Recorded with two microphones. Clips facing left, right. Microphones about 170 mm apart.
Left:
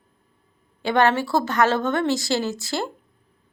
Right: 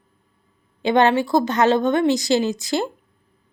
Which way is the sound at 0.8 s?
20° right (ahead or behind).